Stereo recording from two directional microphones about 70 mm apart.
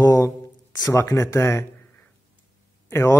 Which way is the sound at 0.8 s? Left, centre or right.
Left.